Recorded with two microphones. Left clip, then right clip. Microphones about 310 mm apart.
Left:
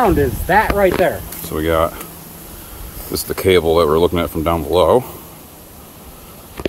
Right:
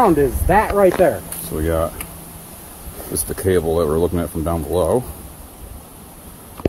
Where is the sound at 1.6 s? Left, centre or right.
Centre.